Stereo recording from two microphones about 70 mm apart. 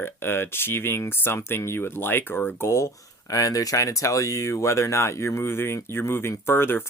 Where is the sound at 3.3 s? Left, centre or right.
Left.